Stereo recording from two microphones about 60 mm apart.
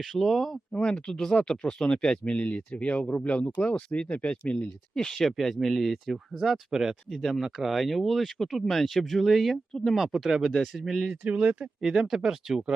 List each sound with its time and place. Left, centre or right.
0.0 s speech: centre
0.7 s speech: centre
11.2 s speech: right
11.8 s speech: centre